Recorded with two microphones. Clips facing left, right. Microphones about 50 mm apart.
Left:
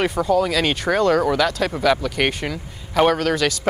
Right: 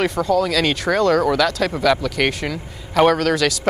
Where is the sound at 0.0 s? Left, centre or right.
Centre.